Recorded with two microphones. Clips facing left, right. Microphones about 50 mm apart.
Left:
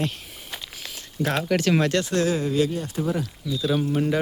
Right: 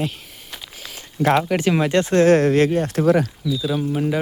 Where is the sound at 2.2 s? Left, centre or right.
Right.